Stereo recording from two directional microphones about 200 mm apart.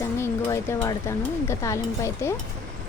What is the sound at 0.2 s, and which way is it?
Speech, 15° left (ahead or behind).